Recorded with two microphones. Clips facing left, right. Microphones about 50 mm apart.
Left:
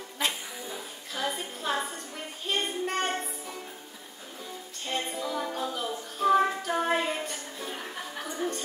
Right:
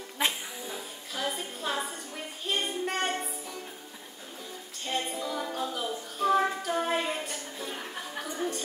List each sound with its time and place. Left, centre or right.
0.2 s music: centre
0.7 s music: centre
2.4 s child singing: centre
4.9 s child singing: centre